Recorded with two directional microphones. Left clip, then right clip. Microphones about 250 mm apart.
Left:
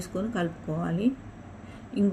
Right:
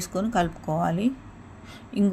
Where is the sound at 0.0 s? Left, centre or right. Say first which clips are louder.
Right 6 dB; right.